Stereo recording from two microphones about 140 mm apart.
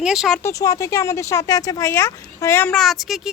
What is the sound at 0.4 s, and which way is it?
Speech, 25° left (ahead or behind).